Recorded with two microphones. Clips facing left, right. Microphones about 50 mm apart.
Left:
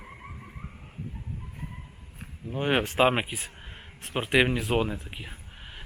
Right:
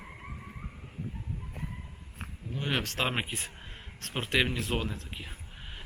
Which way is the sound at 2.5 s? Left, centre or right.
Left.